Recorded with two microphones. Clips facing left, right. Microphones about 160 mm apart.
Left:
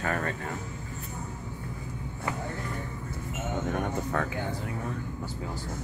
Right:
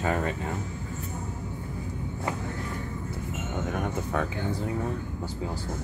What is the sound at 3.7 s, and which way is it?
Speech, 5° right (ahead or behind).